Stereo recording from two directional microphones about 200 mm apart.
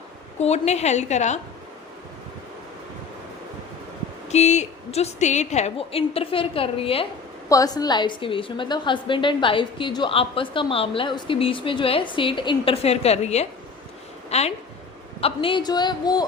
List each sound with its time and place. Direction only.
0.3 s a woman's voice: 35° left (ahead or behind)
4.3 s a woman's voice: 35° left (ahead or behind)
7.5 s a woman's voice: 20° left (ahead or behind)